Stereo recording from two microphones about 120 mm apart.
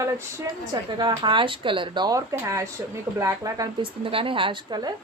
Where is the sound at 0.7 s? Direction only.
35° right (ahead or behind).